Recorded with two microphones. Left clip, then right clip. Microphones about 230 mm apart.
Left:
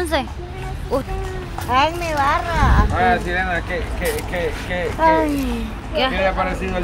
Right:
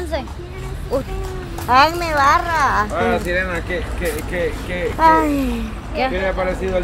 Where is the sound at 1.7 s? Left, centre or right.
Right.